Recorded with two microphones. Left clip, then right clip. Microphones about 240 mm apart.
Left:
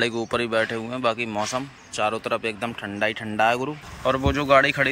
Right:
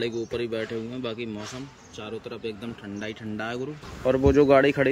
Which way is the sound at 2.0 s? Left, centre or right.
Left.